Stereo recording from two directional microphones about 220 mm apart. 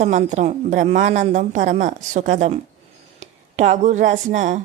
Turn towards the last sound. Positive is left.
turn(degrees=-35)  # may be behind; listen again after turning